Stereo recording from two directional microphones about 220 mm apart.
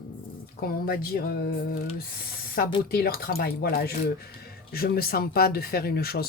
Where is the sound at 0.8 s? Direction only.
45° left (ahead or behind).